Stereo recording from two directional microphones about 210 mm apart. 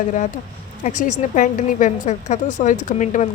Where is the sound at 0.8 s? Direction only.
40° left (ahead or behind).